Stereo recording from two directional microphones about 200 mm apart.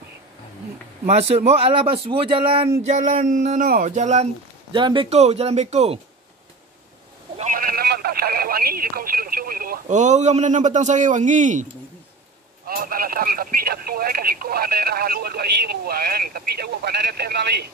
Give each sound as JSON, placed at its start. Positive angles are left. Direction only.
{"t": 1.0, "sound": "speech", "side_deg": -30}
{"t": 7.3, "sound": "speech", "side_deg": -40}
{"t": 12.6, "sound": "speech", "side_deg": -45}